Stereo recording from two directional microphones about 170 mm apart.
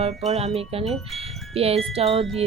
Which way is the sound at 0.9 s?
Centre (ahead or behind).